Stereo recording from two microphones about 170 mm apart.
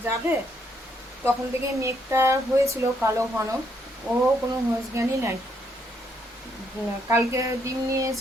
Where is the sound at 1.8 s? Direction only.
15° right (ahead or behind).